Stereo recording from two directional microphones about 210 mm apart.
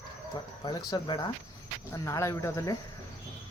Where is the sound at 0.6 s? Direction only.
20° left (ahead or behind).